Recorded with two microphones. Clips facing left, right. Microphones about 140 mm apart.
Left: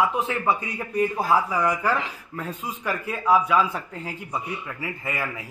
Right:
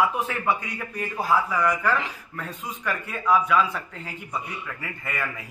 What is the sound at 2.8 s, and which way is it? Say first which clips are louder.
Speech: left 2 dB; 10° left (ahead or behind).